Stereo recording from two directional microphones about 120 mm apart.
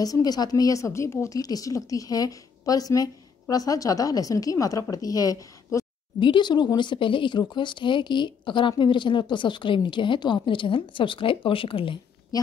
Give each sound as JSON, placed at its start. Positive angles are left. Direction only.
{"t": 0.0, "sound": "a woman's voice", "side_deg": 30}
{"t": 6.1, "sound": "speech", "side_deg": 40}